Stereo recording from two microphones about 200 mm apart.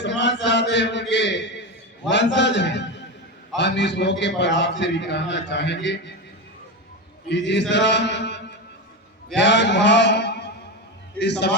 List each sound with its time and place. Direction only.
0.0 s chant: 60° left (ahead or behind)
1.1 s a man's voice: 60° left (ahead or behind)
7.3 s a man's voice: 60° left (ahead or behind)
9.3 s mantra: 60° left (ahead or behind)
11.2 s a man's voice: 60° left (ahead or behind)